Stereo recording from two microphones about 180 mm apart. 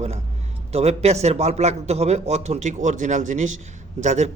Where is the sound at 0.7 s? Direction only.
35° right (ahead or behind).